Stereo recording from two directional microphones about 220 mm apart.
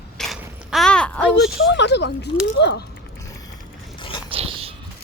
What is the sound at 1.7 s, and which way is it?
Speech, 50° left (ahead or behind).